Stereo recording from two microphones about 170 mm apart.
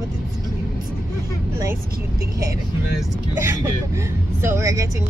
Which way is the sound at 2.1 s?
20° right (ahead or behind).